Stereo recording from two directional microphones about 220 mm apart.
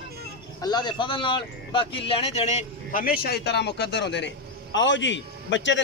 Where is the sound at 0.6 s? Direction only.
20° left (ahead or behind).